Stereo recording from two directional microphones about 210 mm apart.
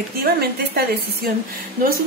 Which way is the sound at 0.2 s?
45° right (ahead or behind).